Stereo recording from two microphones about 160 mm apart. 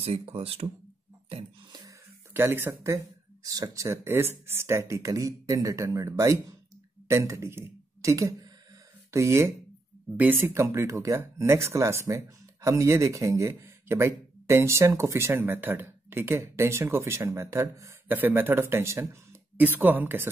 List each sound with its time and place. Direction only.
0.0 s speech: 35° right (ahead or behind)
2.3 s speech: 15° right (ahead or behind)